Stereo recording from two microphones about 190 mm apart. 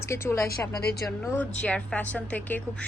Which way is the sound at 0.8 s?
55° left (ahead or behind).